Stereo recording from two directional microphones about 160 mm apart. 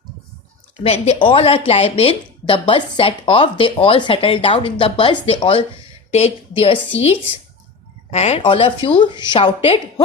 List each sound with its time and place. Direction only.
0.8 s speech: 40° left (ahead or behind)